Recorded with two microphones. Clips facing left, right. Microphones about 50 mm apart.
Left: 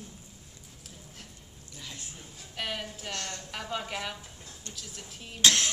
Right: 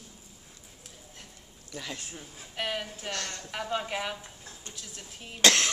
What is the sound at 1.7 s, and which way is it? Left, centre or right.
Speech, right.